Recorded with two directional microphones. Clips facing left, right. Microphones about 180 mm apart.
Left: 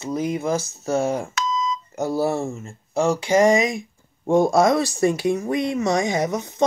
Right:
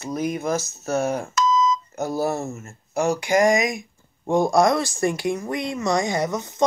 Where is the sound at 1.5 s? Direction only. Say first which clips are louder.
Right 5 dB; 60° left (ahead or behind).